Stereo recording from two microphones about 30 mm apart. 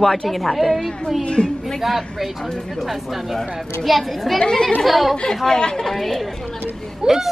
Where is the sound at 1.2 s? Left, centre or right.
Left.